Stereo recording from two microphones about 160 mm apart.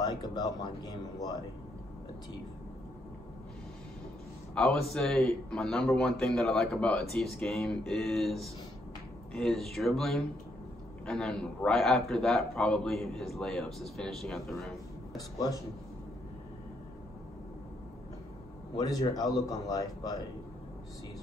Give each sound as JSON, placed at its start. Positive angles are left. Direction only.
{"t": 0.0, "sound": "a man's voice", "side_deg": 25}
{"t": 4.6, "sound": "a man's voice", "side_deg": 0}
{"t": 15.1, "sound": "a man's voice", "side_deg": 20}
{"t": 18.8, "sound": "a man's voice", "side_deg": 25}